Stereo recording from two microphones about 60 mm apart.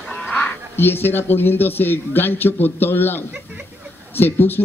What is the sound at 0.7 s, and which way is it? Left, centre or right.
Speech, left.